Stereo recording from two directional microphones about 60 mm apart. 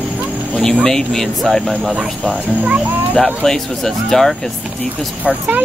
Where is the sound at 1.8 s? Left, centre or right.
Centre.